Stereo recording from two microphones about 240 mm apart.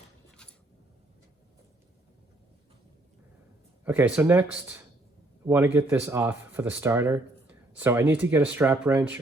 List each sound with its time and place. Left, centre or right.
3.8 s speech: centre